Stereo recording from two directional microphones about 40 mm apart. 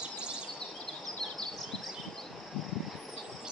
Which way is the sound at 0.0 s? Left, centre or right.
Right.